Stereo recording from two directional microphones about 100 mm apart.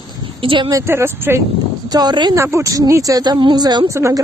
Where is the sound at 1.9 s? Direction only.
45° right (ahead or behind).